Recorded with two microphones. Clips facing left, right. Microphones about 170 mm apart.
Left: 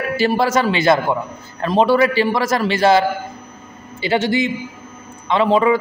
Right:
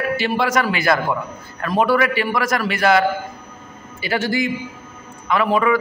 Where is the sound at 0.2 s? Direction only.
30° left (ahead or behind).